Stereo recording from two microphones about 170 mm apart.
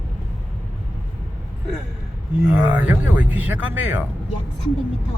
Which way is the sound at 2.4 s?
10° right (ahead or behind).